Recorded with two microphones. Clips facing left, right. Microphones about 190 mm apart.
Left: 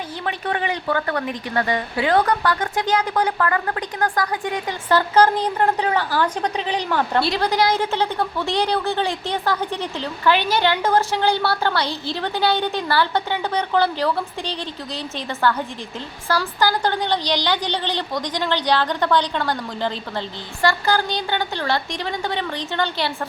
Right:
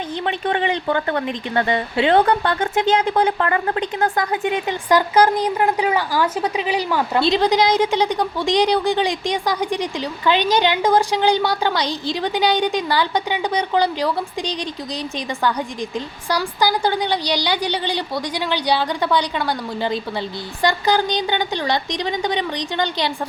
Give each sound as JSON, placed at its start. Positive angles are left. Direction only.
{"t": 0.3, "sound": "speech", "side_deg": -25}
{"t": 7.2, "sound": "a woman's voice", "side_deg": -20}